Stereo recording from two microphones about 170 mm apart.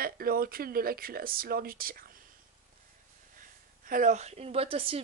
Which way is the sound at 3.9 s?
50° right (ahead or behind).